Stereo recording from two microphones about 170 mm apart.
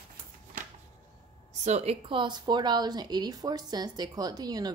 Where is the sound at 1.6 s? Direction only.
40° right (ahead or behind).